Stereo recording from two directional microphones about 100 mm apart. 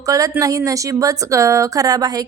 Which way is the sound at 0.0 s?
35° right (ahead or behind).